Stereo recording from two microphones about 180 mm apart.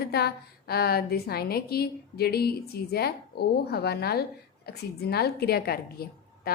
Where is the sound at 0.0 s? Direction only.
60° left (ahead or behind).